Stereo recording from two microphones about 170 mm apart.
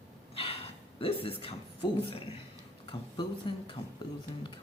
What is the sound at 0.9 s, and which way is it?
Speech, 35° left (ahead or behind).